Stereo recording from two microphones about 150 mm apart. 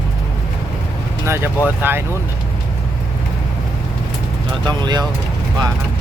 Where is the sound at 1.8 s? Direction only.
15° right (ahead or behind).